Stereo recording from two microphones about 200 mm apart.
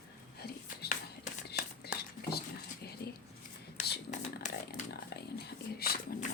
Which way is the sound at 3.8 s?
40° left (ahead or behind).